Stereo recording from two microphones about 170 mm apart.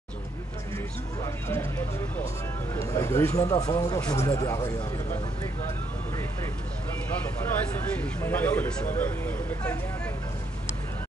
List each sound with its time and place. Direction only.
1.2 s a sound: 15° left (ahead or behind)
2.7 s speech: 20° left (ahead or behind)
8.0 s speech: 10° left (ahead or behind)